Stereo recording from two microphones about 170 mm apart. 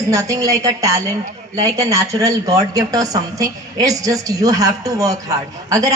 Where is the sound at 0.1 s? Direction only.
20° right (ahead or behind).